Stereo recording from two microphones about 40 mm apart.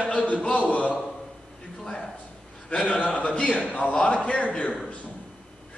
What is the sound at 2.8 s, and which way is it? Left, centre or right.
A man's voice, left.